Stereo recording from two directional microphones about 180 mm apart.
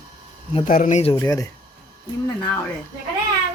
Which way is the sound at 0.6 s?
45° left (ahead or behind).